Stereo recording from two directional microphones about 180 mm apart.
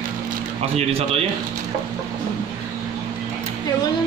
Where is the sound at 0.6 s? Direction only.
35° right (ahead or behind).